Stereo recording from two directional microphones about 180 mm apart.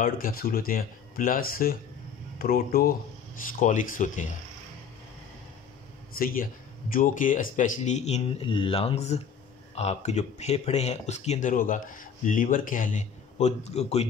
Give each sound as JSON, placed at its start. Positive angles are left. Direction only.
{"t": 0.0, "sound": "speech", "side_deg": 55}
{"t": 6.1, "sound": "speech", "side_deg": 50}